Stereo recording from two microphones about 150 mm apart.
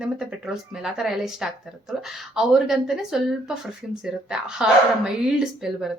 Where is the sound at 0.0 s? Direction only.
5° right (ahead or behind).